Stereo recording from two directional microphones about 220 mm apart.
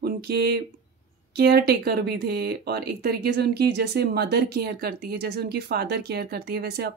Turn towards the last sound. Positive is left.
turn(degrees=-45)  # may be behind; listen again after turning